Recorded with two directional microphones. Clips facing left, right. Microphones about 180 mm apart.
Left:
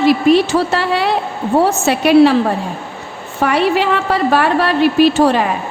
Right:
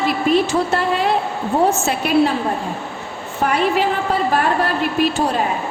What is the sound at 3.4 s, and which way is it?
A woman's voice, 85° left.